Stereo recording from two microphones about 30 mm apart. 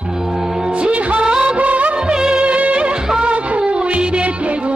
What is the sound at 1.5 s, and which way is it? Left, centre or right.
Music of bollywood, right.